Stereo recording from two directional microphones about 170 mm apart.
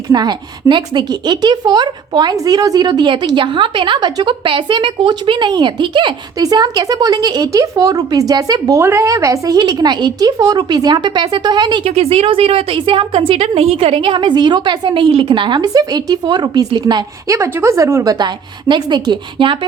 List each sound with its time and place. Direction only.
0.1 s a woman's voice: 25° right (ahead or behind)
11.9 s a woman's voice: 35° right (ahead or behind)